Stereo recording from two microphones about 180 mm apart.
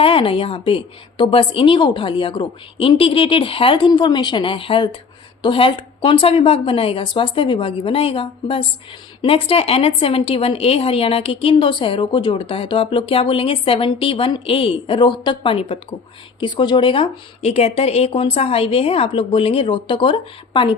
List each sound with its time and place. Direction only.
0.0 s a woman's voice: 30° left (ahead or behind)